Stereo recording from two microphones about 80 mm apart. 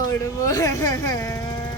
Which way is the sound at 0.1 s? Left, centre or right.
Left.